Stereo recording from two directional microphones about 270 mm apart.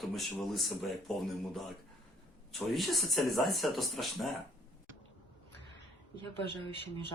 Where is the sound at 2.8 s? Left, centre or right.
Centre.